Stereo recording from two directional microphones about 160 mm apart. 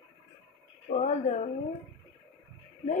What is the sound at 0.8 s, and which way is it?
Speech, 50° left (ahead or behind).